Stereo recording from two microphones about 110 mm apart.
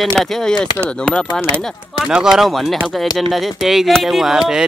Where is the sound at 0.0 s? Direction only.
Centre (ahead or behind).